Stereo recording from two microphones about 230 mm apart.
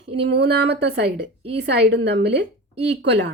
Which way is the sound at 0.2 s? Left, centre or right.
Right.